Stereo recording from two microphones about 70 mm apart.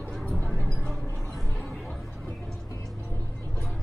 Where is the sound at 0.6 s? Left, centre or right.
Centre.